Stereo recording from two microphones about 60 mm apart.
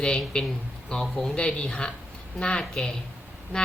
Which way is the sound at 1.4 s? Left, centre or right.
Centre.